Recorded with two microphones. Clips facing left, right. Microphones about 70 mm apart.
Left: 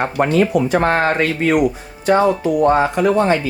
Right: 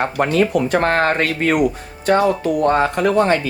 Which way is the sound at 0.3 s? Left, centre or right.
Right.